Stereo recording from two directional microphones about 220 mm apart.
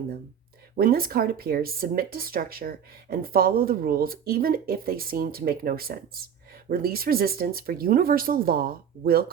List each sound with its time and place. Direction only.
0.8 s speech: 40° right (ahead or behind)